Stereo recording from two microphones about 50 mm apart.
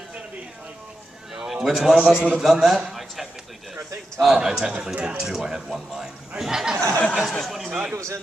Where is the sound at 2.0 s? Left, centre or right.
Right.